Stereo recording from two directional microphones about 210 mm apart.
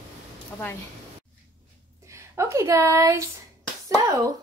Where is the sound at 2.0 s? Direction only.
15° right (ahead or behind).